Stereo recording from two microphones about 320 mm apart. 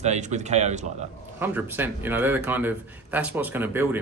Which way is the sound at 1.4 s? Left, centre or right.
Centre.